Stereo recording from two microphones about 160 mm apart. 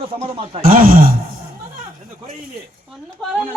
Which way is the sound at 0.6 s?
60° right (ahead or behind).